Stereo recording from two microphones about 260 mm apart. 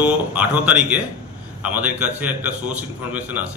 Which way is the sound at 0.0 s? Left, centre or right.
Centre.